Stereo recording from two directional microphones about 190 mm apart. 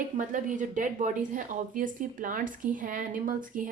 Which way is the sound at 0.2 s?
45° right (ahead or behind).